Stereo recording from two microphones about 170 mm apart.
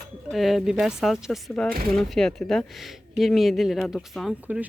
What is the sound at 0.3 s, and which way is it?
Speech, centre (ahead or behind).